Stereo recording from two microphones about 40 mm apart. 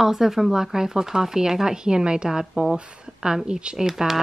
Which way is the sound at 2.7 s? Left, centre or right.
Right.